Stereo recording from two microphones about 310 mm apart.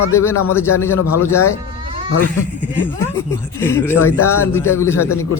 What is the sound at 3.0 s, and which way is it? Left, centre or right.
Speech, centre.